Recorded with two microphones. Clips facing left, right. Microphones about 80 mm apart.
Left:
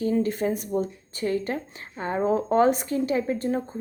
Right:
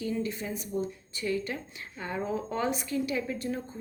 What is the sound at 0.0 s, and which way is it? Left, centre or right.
A woman's voice, left.